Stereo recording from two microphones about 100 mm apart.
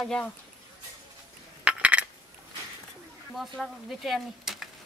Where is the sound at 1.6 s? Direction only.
10° right (ahead or behind).